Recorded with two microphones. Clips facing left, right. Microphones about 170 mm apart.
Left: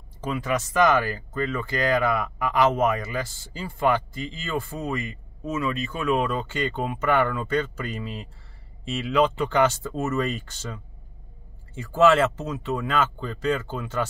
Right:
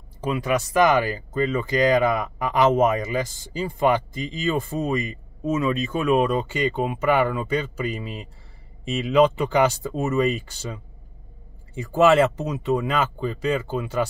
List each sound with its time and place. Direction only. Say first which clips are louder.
0.3 s speech: right 4 dB; 10° right (ahead or behind)